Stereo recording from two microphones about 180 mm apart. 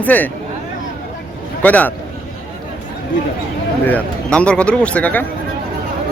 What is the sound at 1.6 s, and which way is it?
Speech, 10° left (ahead or behind).